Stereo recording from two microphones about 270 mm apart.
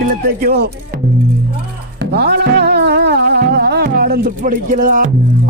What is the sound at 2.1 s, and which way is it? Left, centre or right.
Speech, right.